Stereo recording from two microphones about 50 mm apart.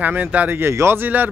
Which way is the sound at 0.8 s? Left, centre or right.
Right.